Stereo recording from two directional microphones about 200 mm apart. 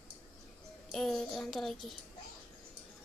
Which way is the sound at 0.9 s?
Centre (ahead or behind).